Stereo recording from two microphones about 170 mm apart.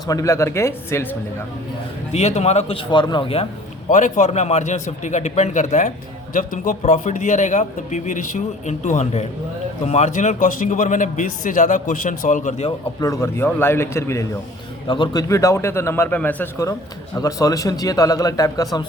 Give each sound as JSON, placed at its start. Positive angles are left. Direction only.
{"t": 0.1, "sound": "a man's voice", "side_deg": 20}
{"t": 2.1, "sound": "speech", "side_deg": 40}
{"t": 3.8, "sound": "a man's voice", "side_deg": 45}
{"t": 13.0, "sound": "a man's voice", "side_deg": 15}
{"t": 14.8, "sound": "a man's voice", "side_deg": 25}